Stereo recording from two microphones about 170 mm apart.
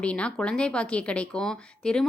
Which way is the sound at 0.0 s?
5° left (ahead or behind).